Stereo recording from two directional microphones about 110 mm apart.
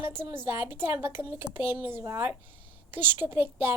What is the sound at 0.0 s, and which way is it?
A woman's voice, 20° right (ahead or behind).